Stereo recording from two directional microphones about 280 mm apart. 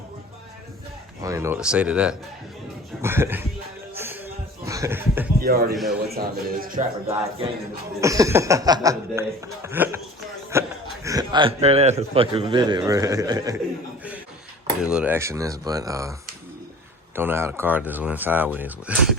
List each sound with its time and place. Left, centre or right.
1.2 s a man's voice: centre
3.9 s a sound: centre
5.4 s speech: right
5.7 s speech: centre
6.1 s speech: right
8.0 s a man's voice: centre
10.5 s a sound: centre
11.0 s a man's voice: centre
14.8 s speech: centre
17.2 s a man's voice: centre